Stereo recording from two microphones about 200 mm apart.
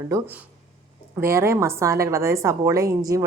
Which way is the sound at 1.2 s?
15° right (ahead or behind).